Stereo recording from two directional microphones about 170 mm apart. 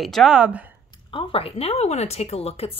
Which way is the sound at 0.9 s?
30° left (ahead or behind).